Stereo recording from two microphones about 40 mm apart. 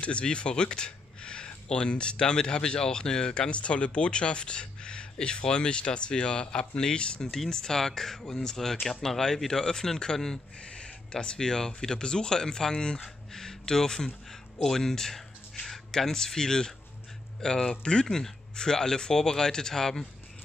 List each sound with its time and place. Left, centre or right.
0.0 s speech: left
3.4 s speech: left
10.6 s a sound: left
11.3 s speech: centre